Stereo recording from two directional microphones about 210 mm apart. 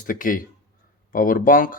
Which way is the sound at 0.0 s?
40° left (ahead or behind).